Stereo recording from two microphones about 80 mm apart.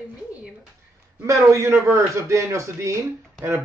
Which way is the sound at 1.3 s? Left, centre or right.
Right.